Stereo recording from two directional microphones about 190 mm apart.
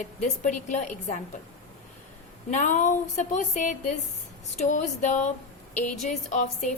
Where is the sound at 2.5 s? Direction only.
40° left (ahead or behind).